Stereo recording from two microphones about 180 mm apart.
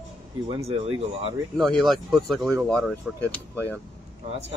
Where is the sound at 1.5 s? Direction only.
Centre (ahead or behind).